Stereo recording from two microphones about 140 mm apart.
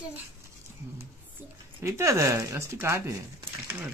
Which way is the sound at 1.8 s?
20° right (ahead or behind).